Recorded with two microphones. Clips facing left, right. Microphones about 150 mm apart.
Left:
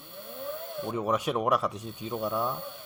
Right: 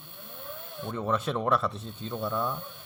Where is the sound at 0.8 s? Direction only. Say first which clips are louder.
Left 1 dB; 15° left (ahead or behind).